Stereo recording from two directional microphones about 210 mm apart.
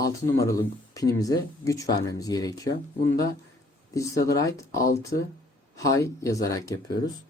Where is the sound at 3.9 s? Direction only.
15° left (ahead or behind).